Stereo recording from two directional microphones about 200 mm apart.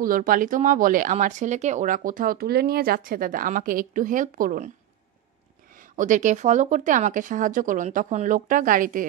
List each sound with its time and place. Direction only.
0.0 s speech: 45° right (ahead or behind)
5.8 s speech: 40° right (ahead or behind)